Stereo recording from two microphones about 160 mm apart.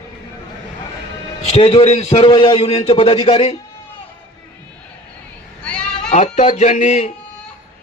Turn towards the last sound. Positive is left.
turn(degrees=45)  # may be behind; listen again after turning